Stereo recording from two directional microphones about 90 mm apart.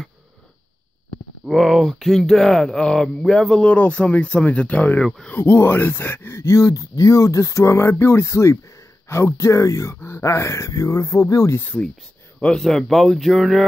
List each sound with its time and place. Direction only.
1.4 s speech: centre (ahead or behind)
3.7 s speech: 15° left (ahead or behind)
5.0 s speech: 5° left (ahead or behind)
5.3 s speech: 30° left (ahead or behind)
12.4 s speech: 10° left (ahead or behind)